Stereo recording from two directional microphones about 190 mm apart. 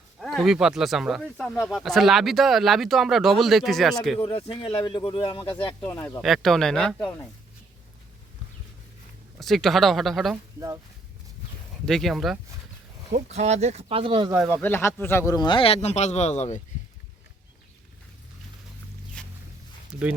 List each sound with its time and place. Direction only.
0.2 s speech: centre (ahead or behind)
4.2 s speech: 30° left (ahead or behind)
5.8 s speech: 10° left (ahead or behind)
6.2 s speech: centre (ahead or behind)
9.4 s speech: centre (ahead or behind)
11.9 s speech: centre (ahead or behind)
13.3 s speech: 35° right (ahead or behind)
14.5 s speech: 10° left (ahead or behind); by 16.6 s 35° left (ahead or behind)
19.2 s walk: 5° left (ahead or behind)
19.9 s speech: 5° right (ahead or behind)